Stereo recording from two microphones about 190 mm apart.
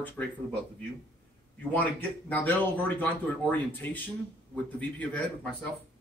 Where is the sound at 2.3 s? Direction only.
10° left (ahead or behind).